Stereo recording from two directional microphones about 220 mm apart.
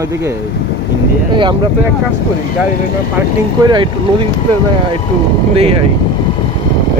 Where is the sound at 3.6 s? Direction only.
20° right (ahead or behind).